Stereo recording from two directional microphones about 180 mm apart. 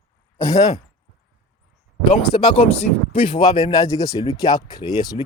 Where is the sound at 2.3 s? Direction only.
30° left (ahead or behind).